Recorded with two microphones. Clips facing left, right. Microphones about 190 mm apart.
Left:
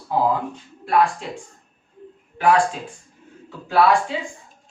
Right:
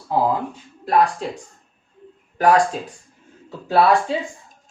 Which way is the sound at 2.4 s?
40° right (ahead or behind).